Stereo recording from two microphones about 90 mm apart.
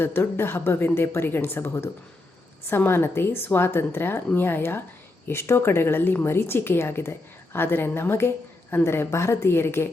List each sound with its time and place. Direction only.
0.0 s a woman's voice: 25° left (ahead or behind)